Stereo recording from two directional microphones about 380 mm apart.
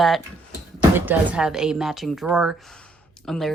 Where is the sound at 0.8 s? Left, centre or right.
Centre.